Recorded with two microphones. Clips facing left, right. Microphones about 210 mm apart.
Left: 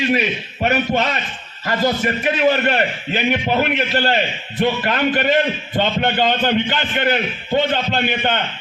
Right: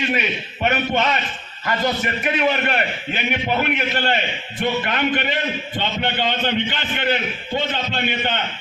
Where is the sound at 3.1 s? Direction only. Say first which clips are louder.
Left 4 dB; 40° left (ahead or behind).